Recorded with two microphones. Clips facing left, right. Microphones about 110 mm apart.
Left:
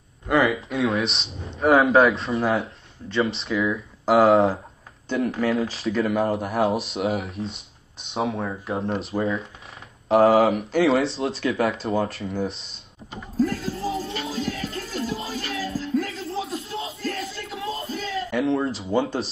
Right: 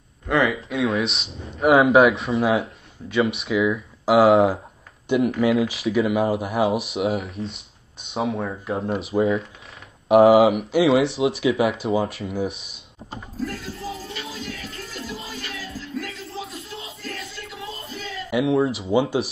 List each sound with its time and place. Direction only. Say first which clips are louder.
0.3 s speech: even; centre (ahead or behind); by 5.3 s 15° right (ahead or behind)
5.5 s speech: right 3 dB; 5° right (ahead or behind)
13.9 s music: left 6 dB; 30° left (ahead or behind)
18.3 s speech: right 4 dB; 10° right (ahead or behind)